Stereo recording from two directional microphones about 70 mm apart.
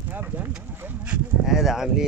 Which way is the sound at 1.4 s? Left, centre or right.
Centre.